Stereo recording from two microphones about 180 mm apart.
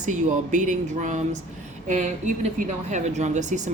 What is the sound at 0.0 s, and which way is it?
A woman's voice, 45° right (ahead or behind).